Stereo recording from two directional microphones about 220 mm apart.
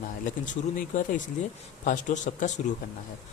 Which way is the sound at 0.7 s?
40° left (ahead or behind).